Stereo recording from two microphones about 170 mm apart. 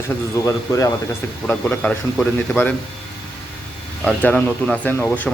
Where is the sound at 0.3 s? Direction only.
20° left (ahead or behind).